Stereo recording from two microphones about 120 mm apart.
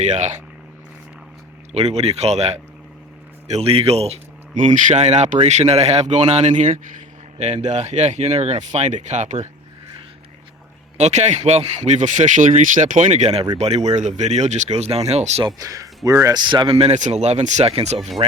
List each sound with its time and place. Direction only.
0.0 s speech: 80° right
1.7 s a man's voice: 60° right (ahead or behind)
10.9 s a man's voice: 70° right (ahead or behind)
15.4 s speech: 30° right (ahead or behind)
16.7 s speech: 65° right (ahead or behind)